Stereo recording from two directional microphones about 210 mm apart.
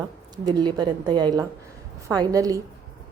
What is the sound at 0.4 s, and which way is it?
A woman's voice, 20° right (ahead or behind).